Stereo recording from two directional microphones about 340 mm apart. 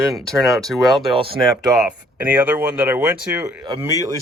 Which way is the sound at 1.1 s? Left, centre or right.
Centre.